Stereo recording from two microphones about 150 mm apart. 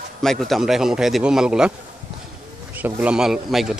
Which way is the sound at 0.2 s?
Centre (ahead or behind).